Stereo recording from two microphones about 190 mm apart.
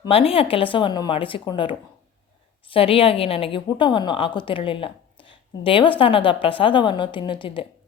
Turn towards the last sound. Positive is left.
turn(degrees=25)  # may be behind; listen again after turning